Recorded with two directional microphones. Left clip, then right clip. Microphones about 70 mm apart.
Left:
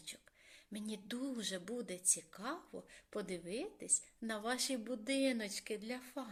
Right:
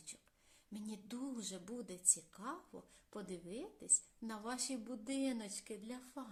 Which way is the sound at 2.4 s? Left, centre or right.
Left.